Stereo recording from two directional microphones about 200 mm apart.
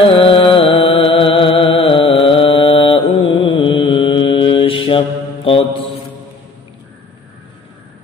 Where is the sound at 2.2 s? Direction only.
25° left (ahead or behind).